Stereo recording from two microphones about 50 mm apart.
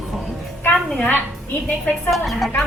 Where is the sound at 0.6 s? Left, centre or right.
Left.